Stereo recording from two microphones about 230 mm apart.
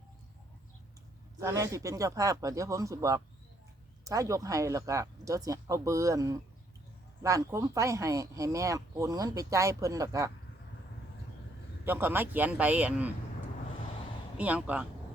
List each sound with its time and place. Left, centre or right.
1.4 s speech: centre
11.9 s speech: centre
14.3 s speech: centre